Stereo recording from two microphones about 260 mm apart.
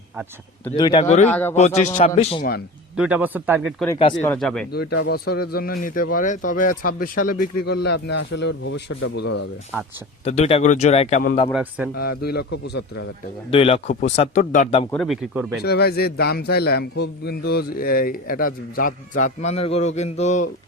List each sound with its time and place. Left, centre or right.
0.7 s speech: centre
1.3 s speech: centre
1.5 s speech: left
2.9 s speech: centre
5.0 s a man's voice: left
10.2 s speech: left
11.5 s speech: centre
11.9 s a man's voice: left
13.5 s speech: left
14.8 s speech: centre
15.6 s a man's voice: left